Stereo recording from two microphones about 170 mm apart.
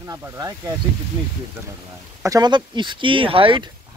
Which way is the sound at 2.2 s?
20° right (ahead or behind).